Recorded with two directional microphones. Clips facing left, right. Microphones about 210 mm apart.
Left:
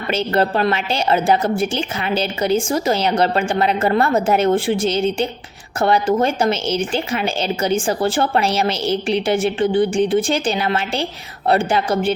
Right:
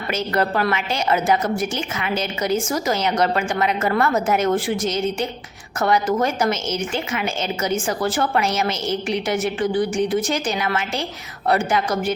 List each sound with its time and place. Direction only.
0.1 s a woman's voice: 30° left (ahead or behind)